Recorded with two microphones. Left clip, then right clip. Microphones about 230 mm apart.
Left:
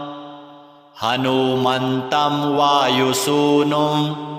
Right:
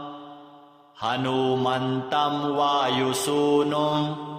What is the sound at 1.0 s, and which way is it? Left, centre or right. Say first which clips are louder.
Mantra: left 6 dB; left.